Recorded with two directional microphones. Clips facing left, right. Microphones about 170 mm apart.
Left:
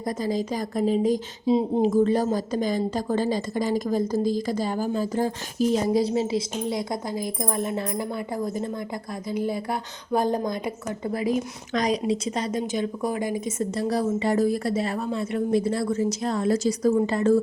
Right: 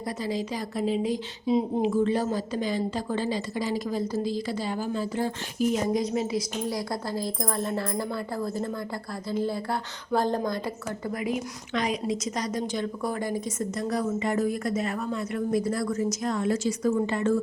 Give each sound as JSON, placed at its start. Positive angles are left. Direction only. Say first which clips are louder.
{"t": 0.2, "sound": "a woman's voice", "louder": "left 3 dB", "side_deg": 45}
{"t": 1.5, "sound": "a woman's voice", "louder": "left 3 dB", "side_deg": 30}
{"t": 1.8, "sound": "a woman's voice", "louder": "left 4 dB", "side_deg": 40}
{"t": 11.0, "sound": "a woman's voice", "louder": "left 5 dB", "side_deg": 30}
{"t": 13.6, "sound": "a woman's voice", "louder": "left 5 dB", "side_deg": 30}